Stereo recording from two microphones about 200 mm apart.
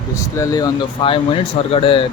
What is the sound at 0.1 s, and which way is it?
Speech, 15° left (ahead or behind).